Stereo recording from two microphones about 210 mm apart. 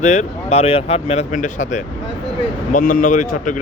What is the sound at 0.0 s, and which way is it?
Speech, 35° left (ahead or behind).